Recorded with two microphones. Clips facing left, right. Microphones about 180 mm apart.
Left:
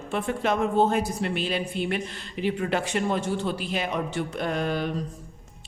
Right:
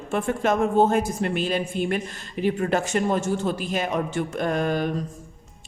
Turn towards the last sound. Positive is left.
turn(degrees=-45)  # may be behind; listen again after turning